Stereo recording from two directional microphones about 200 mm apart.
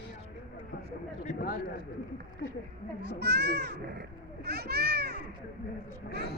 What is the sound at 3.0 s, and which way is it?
A child's voice, 55° right (ahead or behind).